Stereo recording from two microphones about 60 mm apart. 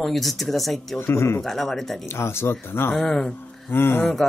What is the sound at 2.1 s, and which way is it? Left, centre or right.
Speech, left.